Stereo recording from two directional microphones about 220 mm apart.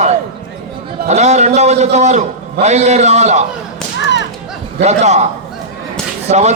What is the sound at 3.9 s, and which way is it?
Whip, 55° left (ahead or behind).